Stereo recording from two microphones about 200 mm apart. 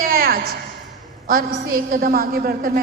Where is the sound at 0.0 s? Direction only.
50° right (ahead or behind).